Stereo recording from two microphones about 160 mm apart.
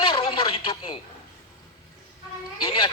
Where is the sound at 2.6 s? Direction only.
30° left (ahead or behind).